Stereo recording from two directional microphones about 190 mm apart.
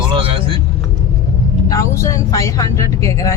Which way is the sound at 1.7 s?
15° left (ahead or behind).